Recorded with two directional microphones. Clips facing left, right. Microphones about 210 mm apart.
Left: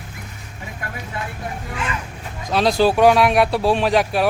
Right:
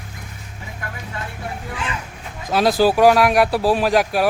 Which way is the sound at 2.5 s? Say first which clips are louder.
Right 1 dB; 5° right (ahead or behind).